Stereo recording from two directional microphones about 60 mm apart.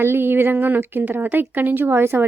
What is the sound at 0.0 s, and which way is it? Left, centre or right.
Speech, right.